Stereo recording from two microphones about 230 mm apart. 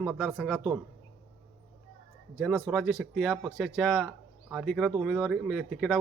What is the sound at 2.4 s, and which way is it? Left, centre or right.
Speech, centre.